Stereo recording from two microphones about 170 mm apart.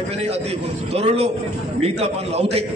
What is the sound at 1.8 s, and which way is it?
Speech, 35° right (ahead or behind).